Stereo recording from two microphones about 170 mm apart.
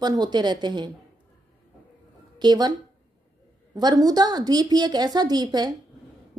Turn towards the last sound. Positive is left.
turn(degrees=-25)  # may be behind; listen again after turning